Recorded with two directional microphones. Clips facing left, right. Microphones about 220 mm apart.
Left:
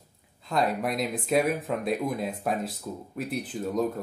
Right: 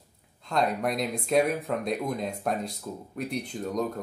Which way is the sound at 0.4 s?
5° left (ahead or behind).